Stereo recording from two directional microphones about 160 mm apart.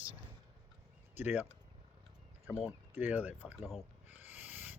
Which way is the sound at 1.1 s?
10° right (ahead or behind).